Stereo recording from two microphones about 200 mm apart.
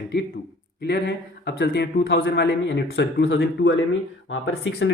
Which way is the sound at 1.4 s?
55° left (ahead or behind).